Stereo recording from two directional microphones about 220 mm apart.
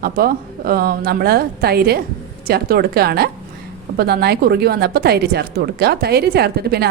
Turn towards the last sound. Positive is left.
turn(degrees=-45)  # may be behind; listen again after turning